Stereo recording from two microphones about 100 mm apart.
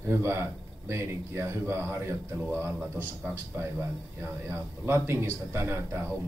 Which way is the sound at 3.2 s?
20° right (ahead or behind).